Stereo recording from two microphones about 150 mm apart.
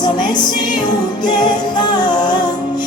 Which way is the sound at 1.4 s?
30° left (ahead or behind).